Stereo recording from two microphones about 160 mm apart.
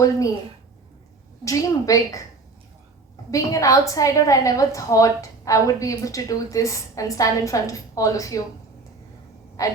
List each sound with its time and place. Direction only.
1.5 s a woman's voice: 20° left (ahead or behind)
3.3 s a woman's voice: 20° left (ahead or behind)
9.6 s a woman's voice: 20° left (ahead or behind)